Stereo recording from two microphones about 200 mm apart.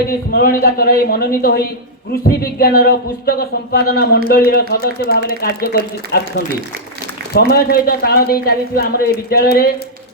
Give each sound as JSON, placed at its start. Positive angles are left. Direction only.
{"t": 0.3, "sound": "a woman's voice", "side_deg": 50}
{"t": 7.3, "sound": "a woman's voice", "side_deg": 50}